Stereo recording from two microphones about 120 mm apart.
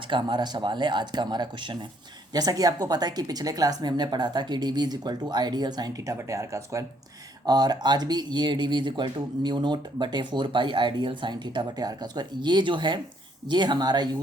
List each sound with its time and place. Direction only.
0.1 s speech: 40° right (ahead or behind)
6.1 s speech: 25° right (ahead or behind)